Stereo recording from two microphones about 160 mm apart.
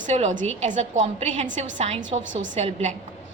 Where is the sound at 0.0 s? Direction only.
45° right (ahead or behind).